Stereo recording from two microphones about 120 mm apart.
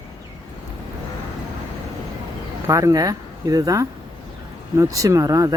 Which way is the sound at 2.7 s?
25° right (ahead or behind).